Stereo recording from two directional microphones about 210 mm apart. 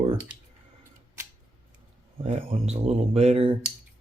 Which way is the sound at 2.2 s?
25° right (ahead or behind).